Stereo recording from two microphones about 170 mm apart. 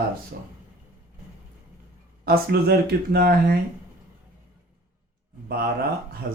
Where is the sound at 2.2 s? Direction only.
65° right (ahead or behind).